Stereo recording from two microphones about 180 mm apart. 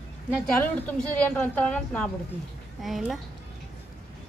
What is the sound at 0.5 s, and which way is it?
A woman's voice, 10° left (ahead or behind).